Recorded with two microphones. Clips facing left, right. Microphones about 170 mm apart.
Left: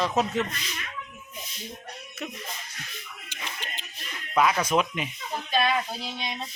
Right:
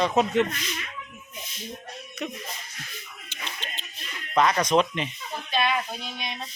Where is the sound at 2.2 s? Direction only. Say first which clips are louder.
Right 4 dB; 5° left (ahead or behind).